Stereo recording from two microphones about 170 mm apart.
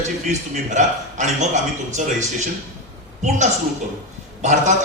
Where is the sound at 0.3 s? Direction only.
45° right (ahead or behind).